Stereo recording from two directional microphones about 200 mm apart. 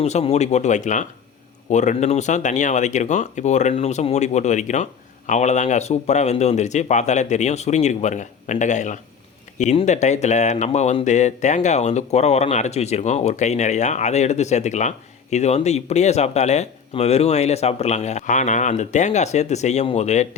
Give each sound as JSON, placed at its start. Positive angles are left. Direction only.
{"t": 0.0, "sound": "speech", "side_deg": 30}